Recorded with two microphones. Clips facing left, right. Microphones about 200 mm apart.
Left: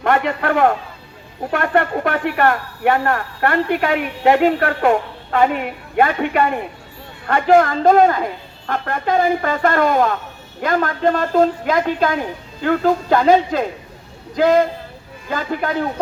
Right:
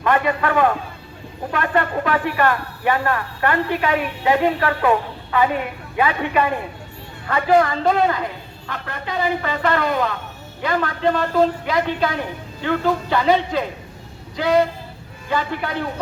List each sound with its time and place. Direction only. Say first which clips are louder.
0.0 s a man's voice: left 1 dB; 65° left (ahead or behind)
1.5 s a man's voice: left 3 dB; 50° left (ahead or behind); by 7.5 s 70° left (ahead or behind)
7.5 s speech: left 4 dB; 45° left (ahead or behind)